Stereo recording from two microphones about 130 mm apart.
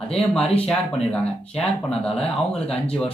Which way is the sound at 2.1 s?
50° left (ahead or behind).